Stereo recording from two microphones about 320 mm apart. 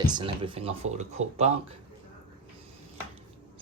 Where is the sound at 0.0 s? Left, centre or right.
Centre.